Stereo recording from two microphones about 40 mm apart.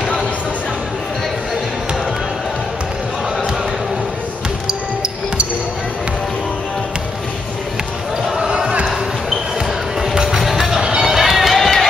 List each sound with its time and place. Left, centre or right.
4.6 s music: centre
10.0 s music: centre
11.0 s run: centre